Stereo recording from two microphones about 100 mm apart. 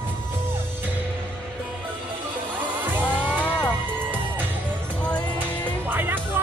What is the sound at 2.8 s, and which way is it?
Music, 20° right (ahead or behind).